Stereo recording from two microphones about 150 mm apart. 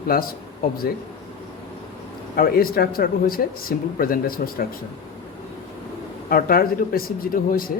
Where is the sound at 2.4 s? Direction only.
80° left.